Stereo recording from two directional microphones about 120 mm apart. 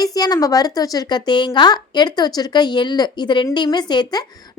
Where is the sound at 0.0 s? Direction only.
30° left (ahead or behind).